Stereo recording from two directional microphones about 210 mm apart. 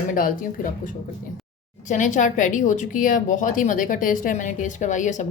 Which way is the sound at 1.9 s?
35° left (ahead or behind).